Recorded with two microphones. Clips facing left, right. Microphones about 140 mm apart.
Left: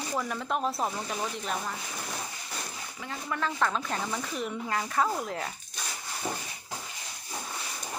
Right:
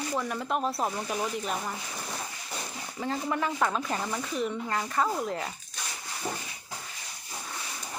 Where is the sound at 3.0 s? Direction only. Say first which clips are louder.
Right 6 dB; 35° right (ahead or behind).